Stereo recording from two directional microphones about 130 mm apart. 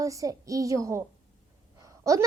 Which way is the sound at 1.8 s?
25° right (ahead or behind).